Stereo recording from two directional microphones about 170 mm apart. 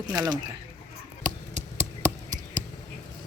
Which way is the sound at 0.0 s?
25° right (ahead or behind).